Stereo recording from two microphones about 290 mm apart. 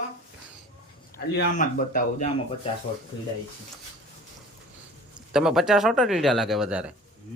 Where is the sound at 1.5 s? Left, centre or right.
Left.